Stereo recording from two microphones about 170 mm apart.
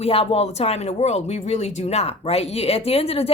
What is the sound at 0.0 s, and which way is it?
Speech, 35° left (ahead or behind).